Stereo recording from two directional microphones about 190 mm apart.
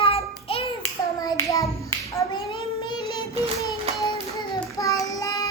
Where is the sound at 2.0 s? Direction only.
20° left (ahead or behind).